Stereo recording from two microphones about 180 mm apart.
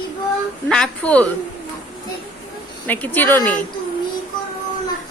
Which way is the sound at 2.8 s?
10° left (ahead or behind).